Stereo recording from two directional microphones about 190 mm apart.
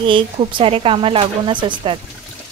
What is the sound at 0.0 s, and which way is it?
Speech, 25° right (ahead or behind).